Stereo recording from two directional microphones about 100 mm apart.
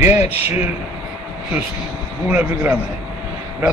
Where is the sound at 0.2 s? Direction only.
90° left.